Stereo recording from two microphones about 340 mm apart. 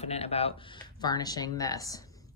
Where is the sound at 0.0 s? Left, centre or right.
Centre.